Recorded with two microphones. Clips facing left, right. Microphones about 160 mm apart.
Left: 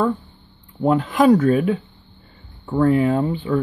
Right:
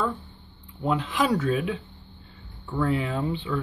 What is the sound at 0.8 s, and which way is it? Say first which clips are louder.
Speech: left 9 dB; 45° left (ahead or behind).